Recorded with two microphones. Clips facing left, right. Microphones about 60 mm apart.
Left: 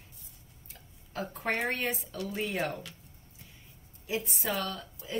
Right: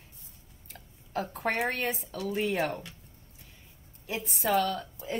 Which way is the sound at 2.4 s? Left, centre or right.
Right.